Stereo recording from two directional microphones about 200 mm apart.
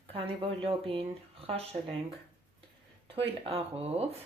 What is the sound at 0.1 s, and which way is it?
Speech, 30° right (ahead or behind).